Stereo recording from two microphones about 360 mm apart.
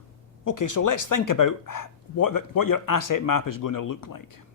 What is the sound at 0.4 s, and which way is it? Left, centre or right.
Speech, left.